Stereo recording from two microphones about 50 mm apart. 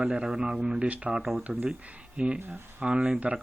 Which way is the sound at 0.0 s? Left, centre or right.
Centre.